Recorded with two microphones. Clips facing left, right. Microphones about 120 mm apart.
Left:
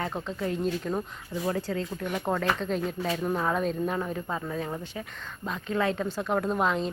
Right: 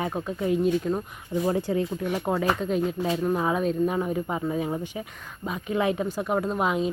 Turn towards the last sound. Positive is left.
turn(degrees=-5)  # may be behind; listen again after turning